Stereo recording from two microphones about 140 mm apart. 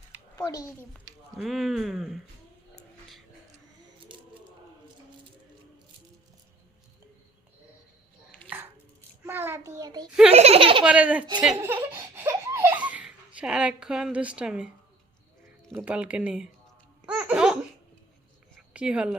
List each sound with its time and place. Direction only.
0.3 s a child's voice: 25° left (ahead or behind)
1.4 s speech: centre (ahead or behind)
2.7 s cat: centre (ahead or behind)
4.1 s a sound: 35° right (ahead or behind)
8.4 s chopping: 15° right (ahead or behind)
9.2 s a child's voice: 15° right (ahead or behind)
10.3 s speech: 45° right (ahead or behind)
10.8 s speech: 10° right (ahead or behind)
12.1 s baby laughter: 20° right (ahead or behind)
15.7 s speech: 10° right (ahead or behind)
17.1 s laughter: 10° right (ahead or behind)
18.7 s speech: 10° right (ahead or behind)